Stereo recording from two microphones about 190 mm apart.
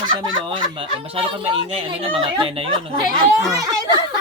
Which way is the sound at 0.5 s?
25° right (ahead or behind).